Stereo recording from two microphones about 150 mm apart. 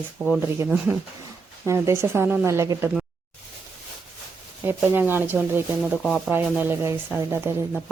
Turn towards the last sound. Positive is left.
turn(degrees=-15)  # may be behind; listen again after turning